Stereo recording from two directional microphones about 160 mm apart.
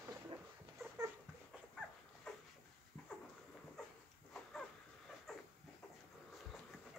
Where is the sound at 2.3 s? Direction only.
5° left (ahead or behind).